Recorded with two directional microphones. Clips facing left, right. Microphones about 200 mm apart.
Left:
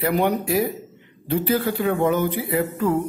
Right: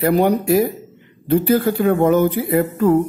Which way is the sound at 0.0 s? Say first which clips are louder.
Right 5 dB; 40° right (ahead or behind).